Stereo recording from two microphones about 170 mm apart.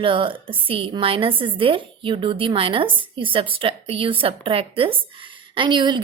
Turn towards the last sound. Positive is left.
turn(degrees=-25)  # may be behind; listen again after turning